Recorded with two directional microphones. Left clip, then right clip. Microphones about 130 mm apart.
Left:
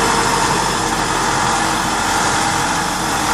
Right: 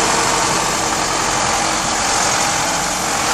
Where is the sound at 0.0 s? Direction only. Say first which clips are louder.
Left 1 dB; 15° right (ahead or behind).